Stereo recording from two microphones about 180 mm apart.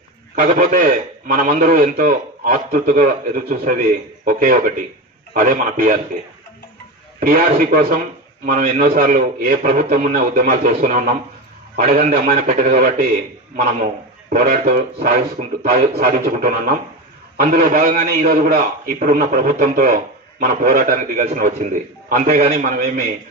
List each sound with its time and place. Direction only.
0.4 s a man's voice: 50° right (ahead or behind)
7.2 s a man's voice: 50° right (ahead or behind)
14.3 s a man's voice: 50° right (ahead or behind)
15.4 s a man's voice: 35° right (ahead or behind)
15.7 s a man's voice: 55° right (ahead or behind)